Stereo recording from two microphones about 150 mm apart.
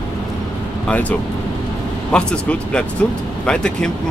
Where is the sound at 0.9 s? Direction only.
10° left (ahead or behind).